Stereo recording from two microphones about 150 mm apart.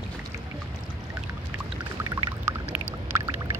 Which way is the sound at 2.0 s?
20° right (ahead or behind).